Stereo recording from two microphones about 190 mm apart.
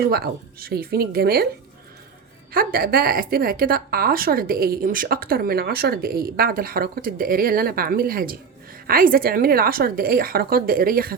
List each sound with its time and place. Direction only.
0.1 s a woman's voice: 55° right (ahead or behind)
2.5 s a woman's voice: 50° right (ahead or behind)